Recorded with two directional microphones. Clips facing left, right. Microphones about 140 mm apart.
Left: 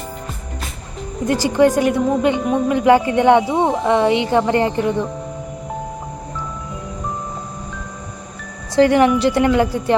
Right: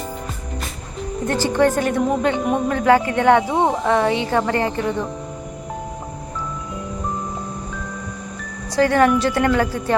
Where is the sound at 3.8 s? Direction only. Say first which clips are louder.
Left 3 dB; 20° left (ahead or behind).